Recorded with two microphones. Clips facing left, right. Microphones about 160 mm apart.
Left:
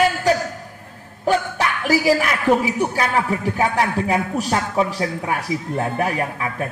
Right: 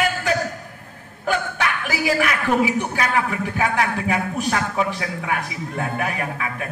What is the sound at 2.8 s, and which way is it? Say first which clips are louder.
A man's voice: left 2 dB; 35° left (ahead or behind).